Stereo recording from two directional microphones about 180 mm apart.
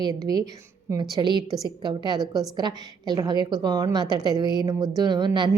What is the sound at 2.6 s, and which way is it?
A woman's voice, 25° right (ahead or behind).